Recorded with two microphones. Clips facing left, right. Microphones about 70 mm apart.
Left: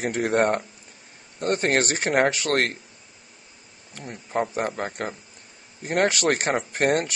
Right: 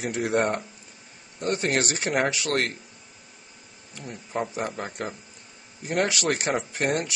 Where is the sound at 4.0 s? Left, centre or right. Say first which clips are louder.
Left 4 dB; left.